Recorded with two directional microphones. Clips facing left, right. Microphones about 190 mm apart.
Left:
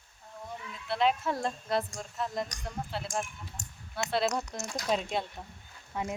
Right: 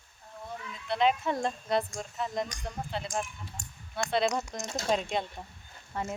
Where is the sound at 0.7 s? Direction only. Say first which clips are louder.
Right 1 dB; 5° left (ahead or behind).